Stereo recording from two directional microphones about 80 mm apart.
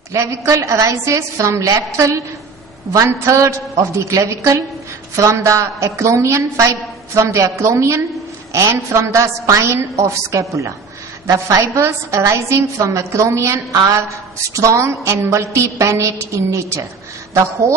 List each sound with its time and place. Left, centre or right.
0.1 s a woman's voice: right